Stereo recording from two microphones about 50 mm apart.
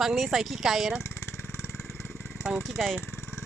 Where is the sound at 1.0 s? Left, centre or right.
Left.